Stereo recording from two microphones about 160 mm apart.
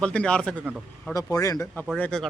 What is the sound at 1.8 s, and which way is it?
Speech, 5° left (ahead or behind).